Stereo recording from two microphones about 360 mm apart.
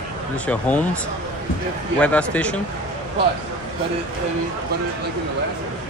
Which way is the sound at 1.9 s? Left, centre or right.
Centre.